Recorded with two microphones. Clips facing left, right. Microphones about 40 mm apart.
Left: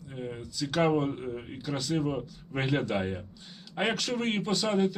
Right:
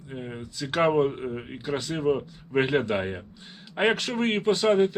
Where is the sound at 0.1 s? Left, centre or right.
Right.